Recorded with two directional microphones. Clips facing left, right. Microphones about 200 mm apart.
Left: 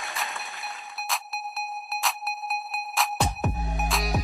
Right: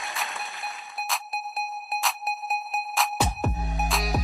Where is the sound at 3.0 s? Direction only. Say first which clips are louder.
Even; centre (ahead or behind).